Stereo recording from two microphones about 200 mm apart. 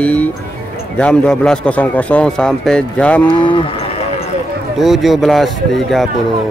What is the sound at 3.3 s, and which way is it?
Speech, 25° left (ahead or behind).